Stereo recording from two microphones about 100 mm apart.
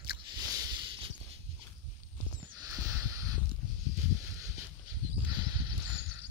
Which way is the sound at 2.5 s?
35° right (ahead or behind).